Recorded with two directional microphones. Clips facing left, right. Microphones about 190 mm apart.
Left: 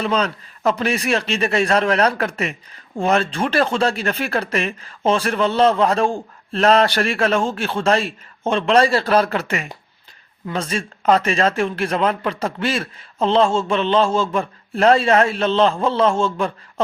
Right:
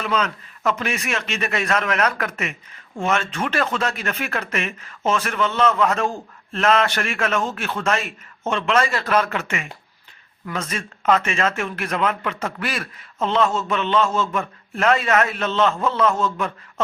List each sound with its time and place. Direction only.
0.0 s a man's voice: 35° left (ahead or behind)